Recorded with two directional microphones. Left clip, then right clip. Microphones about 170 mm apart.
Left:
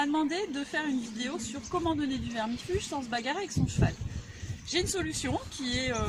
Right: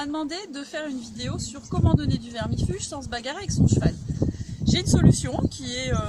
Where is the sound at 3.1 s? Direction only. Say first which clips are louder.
Right 1 dB; 25° right (ahead or behind).